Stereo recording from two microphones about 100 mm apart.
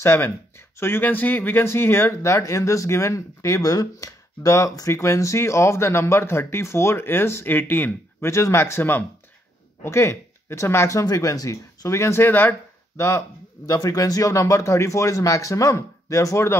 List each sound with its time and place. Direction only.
0.0 s speech: 25° left (ahead or behind)